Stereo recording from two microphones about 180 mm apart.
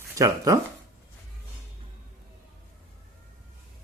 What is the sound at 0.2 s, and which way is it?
Speech, 20° right (ahead or behind).